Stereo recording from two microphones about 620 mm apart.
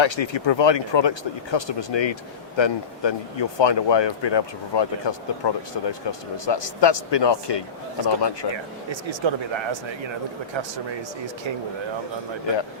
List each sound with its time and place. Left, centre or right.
0.0 s speech: left
8.5 s speech: right